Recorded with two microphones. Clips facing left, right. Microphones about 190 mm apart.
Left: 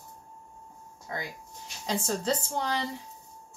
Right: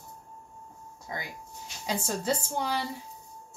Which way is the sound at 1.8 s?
10° right (ahead or behind).